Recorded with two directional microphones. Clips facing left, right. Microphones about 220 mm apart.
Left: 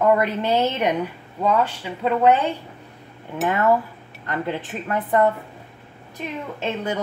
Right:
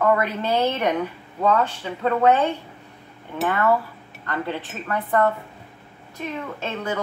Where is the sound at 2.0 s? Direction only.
15° left (ahead or behind).